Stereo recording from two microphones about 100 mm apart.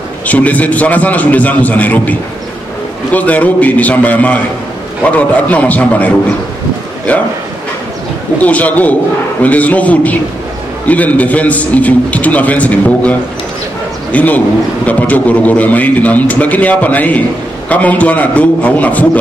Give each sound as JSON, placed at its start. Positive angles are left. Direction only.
{"t": 0.3, "sound": "a man's voice", "side_deg": 15}
{"t": 8.4, "sound": "a man's voice", "side_deg": 15}